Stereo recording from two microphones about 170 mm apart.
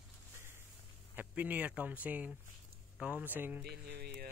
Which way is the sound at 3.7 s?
70° right (ahead or behind).